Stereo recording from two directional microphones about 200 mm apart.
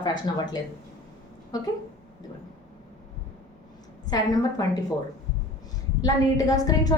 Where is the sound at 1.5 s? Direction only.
20° left (ahead or behind).